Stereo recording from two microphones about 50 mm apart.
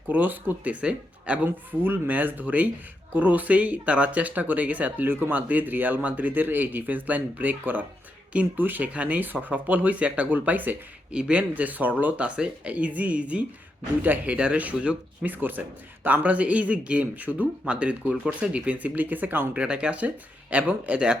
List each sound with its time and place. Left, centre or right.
0.1 s speech: right
1.8 s speech: right
11.1 s speech: right
12.2 s speech: right
14.3 s speech: right
15.2 s speech: right
19.5 s speech: right